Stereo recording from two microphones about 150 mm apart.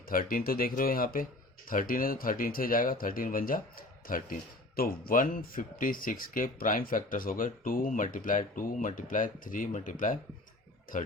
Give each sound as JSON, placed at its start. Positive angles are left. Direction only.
{"t": 0.1, "sound": "speech", "side_deg": 70}